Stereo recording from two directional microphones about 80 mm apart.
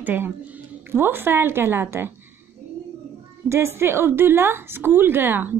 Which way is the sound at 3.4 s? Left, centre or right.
Right.